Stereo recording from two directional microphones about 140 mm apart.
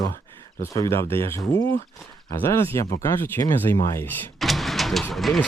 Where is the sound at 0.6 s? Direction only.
20° left (ahead or behind).